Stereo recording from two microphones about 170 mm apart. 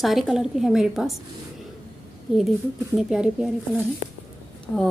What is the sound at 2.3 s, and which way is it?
A woman's voice, centre (ahead or behind).